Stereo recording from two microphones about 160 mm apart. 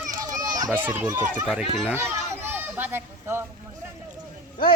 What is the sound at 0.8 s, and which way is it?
Speech, 10° right (ahead or behind).